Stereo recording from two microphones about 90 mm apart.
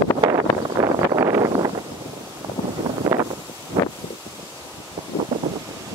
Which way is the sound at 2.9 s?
35° right (ahead or behind).